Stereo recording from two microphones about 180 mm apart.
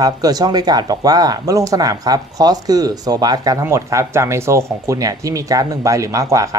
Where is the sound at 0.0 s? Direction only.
20° right (ahead or behind).